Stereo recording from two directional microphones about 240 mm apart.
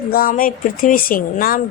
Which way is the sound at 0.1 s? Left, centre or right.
Left.